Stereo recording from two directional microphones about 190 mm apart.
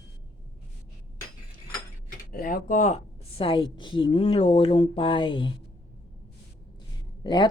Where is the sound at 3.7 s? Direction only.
25° left (ahead or behind).